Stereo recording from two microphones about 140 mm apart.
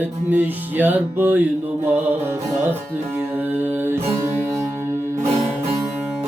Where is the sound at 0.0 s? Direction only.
15° right (ahead or behind).